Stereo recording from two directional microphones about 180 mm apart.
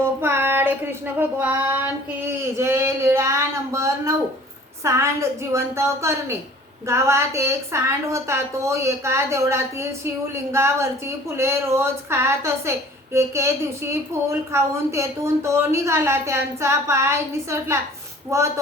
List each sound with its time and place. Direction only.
0.0 s a woman's voice: 10° right (ahead or behind)